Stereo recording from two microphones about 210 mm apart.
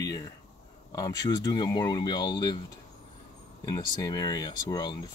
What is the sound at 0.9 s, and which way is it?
Speech, 15° left (ahead or behind).